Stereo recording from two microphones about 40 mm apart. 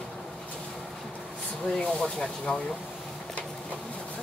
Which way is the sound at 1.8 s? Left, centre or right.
Left.